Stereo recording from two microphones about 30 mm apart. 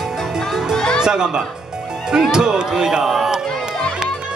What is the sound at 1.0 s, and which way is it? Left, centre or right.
Music, right.